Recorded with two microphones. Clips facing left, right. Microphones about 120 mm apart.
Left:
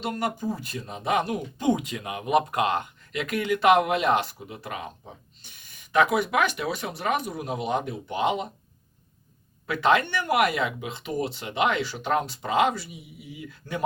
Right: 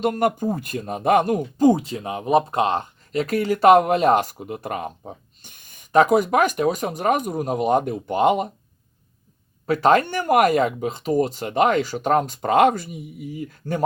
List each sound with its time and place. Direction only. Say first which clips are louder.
0.0 s speech: right 8 dB; 50° right (ahead or behind)
9.6 s speech: right 5 dB; 40° right (ahead or behind)